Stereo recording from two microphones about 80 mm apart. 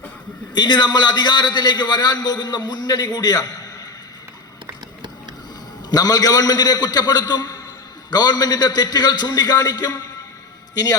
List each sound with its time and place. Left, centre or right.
0.5 s a man's voice: left
5.9 s a man's voice: left